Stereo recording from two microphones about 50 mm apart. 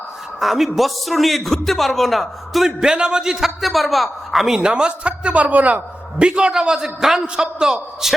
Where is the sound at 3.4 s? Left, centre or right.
Centre.